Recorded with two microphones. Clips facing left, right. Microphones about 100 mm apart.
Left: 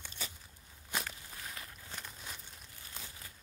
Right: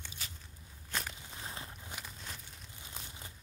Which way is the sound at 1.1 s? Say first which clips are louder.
Right 2 dB; 20° right (ahead or behind).